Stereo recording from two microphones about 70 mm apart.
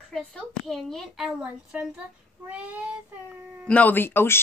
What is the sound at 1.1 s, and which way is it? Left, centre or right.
Speech, centre.